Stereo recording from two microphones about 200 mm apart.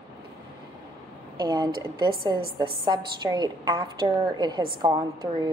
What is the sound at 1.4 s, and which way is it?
Speech, 20° right (ahead or behind).